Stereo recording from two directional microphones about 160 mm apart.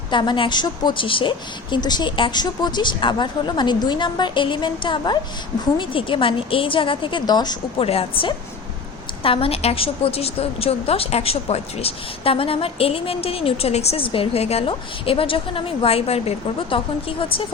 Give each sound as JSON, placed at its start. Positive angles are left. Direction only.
{"t": 0.1, "sound": "a woman's voice", "side_deg": 30}
{"t": 7.9, "sound": "a woman's voice", "side_deg": 35}